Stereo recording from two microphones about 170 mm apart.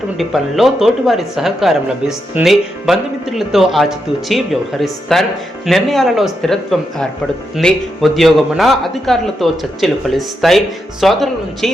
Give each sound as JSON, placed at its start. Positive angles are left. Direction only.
{"t": 0.2, "sound": "speech", "side_deg": 0}